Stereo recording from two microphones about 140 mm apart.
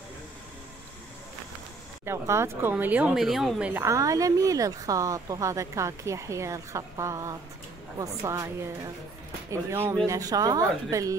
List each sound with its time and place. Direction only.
2.0 s speech: 20° right (ahead or behind)
3.8 s a woman's voice: 20° right (ahead or behind)